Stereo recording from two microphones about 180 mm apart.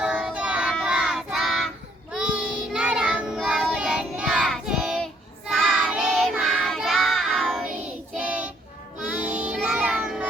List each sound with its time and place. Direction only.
0.0 s child singing: 5° right (ahead or behind)
9.0 s music: 5° right (ahead or behind)
9.6 s child singing: 5° right (ahead or behind)